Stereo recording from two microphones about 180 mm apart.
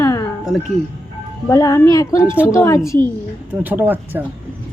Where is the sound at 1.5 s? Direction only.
15° left (ahead or behind).